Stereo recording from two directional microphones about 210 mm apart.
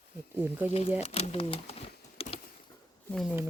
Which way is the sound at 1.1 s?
30° left (ahead or behind).